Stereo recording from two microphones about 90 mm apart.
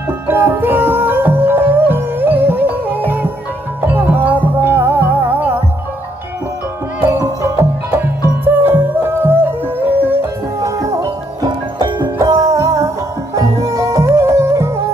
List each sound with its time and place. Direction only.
0.3 s music: 25° right (ahead or behind)
7.1 s music: 25° right (ahead or behind)
10.6 s music: 35° right (ahead or behind)